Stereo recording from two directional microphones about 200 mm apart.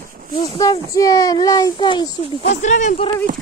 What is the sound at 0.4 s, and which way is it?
A child's voice, 20° left (ahead or behind).